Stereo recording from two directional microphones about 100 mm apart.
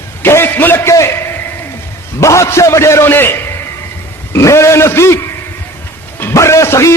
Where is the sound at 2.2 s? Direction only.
30° left (ahead or behind).